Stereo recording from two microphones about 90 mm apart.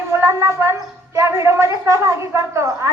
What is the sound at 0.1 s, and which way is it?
A woman's voice, 30° right (ahead or behind).